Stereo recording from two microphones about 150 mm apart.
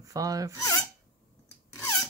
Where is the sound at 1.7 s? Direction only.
20° left (ahead or behind).